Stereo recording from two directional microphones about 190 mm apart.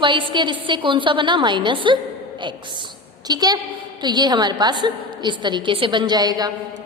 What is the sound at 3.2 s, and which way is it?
A woman's voice, 20° right (ahead or behind).